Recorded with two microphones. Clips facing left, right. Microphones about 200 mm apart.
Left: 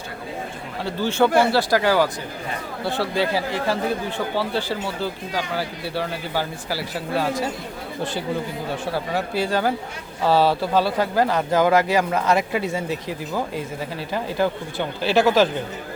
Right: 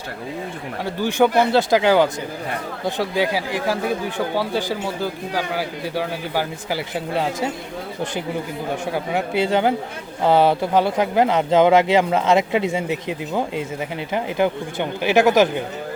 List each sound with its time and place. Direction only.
0.9 s speech: 15° right (ahead or behind)
8.9 s speech: 20° right (ahead or behind)